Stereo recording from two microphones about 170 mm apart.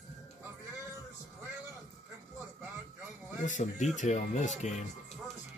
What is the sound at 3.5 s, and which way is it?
Speech, 45° left (ahead or behind).